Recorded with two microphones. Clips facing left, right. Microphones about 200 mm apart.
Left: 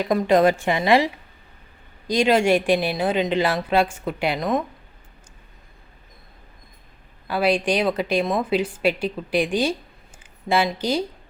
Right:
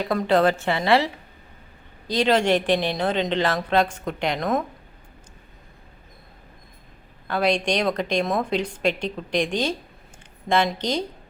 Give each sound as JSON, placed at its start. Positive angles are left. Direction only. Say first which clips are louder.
{"t": 0.0, "sound": "speech", "louder": "left 2 dB", "side_deg": 15}
{"t": 7.3, "sound": "speech", "louder": "left 2 dB", "side_deg": 5}